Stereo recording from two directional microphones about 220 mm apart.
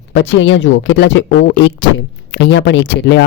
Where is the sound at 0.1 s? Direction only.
60° left (ahead or behind).